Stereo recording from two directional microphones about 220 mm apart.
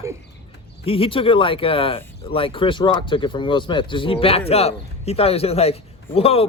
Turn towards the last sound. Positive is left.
turn(degrees=25)  # may be behind; listen again after turning